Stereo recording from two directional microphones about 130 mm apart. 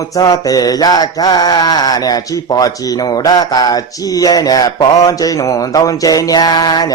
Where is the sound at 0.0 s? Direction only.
30° left (ahead or behind).